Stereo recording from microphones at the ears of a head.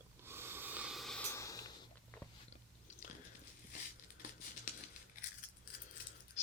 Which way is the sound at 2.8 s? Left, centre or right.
Left.